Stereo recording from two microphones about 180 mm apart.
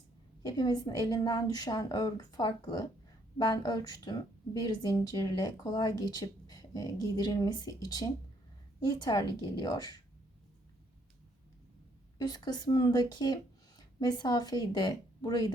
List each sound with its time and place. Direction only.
0.4 s a woman's voice: 20° left (ahead or behind)
12.1 s speech: 20° left (ahead or behind)